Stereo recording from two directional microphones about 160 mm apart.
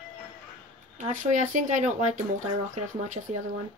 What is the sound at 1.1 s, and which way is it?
Speech, 50° right (ahead or behind).